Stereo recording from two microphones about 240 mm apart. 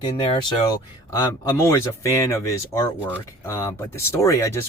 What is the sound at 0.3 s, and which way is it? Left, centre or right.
Speech, centre.